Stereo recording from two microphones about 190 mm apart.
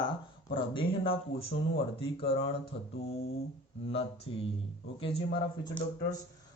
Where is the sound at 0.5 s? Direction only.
25° left (ahead or behind).